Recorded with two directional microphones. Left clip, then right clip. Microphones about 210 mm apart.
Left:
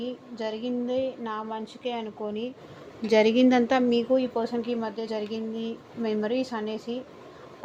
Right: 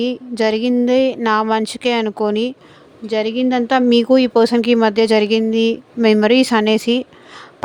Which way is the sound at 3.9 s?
45° right (ahead or behind).